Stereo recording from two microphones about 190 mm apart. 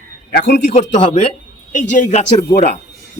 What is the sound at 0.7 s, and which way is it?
Speech, 35° left (ahead or behind).